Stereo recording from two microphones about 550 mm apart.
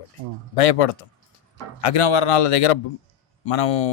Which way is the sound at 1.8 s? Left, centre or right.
Left.